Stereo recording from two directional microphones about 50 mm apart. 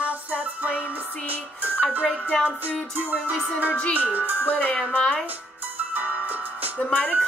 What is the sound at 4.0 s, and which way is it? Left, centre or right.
Speech, right.